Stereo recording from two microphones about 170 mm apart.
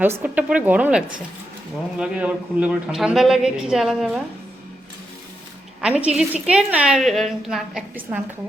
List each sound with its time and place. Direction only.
0.0 s a woman's voice: 10° right (ahead or behind)
5.8 s a woman's voice: 5° right (ahead or behind)